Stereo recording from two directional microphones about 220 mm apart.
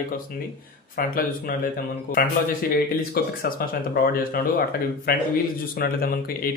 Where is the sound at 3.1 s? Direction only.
40° left (ahead or behind).